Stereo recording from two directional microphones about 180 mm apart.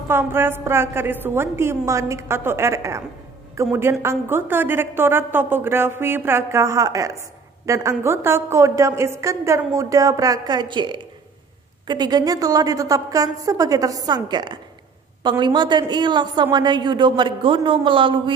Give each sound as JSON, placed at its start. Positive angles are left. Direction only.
{"t": 0.1, "sound": "a woman's voice", "side_deg": -15}